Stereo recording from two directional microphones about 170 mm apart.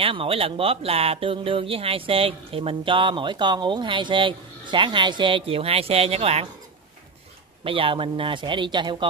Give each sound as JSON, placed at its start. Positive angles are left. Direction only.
{"t": 0.0, "sound": "speech", "side_deg": -35}
{"t": 7.6, "sound": "a man's voice", "side_deg": -30}